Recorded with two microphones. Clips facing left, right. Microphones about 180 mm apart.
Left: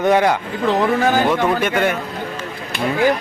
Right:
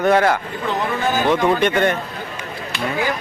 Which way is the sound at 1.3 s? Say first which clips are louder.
Right 1 dB; 5° left (ahead or behind).